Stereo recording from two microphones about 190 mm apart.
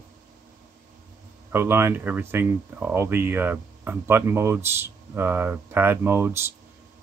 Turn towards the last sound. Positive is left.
turn(degrees=-15)  # may be behind; listen again after turning